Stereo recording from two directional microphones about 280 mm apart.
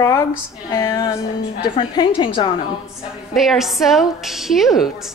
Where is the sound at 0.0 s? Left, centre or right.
Centre.